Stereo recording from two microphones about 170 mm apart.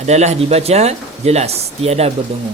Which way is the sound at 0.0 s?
40° right (ahead or behind).